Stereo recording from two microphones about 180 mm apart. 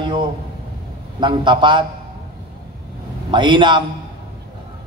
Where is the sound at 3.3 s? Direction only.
25° right (ahead or behind).